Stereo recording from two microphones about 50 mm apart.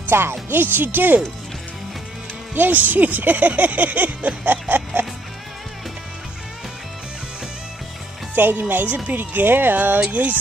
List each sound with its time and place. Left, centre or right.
0.1 s speech: right
2.5 s speech: right
4.5 s a sound: right
8.4 s speech: right